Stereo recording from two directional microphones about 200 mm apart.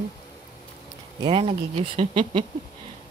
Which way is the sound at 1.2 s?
25° right (ahead or behind).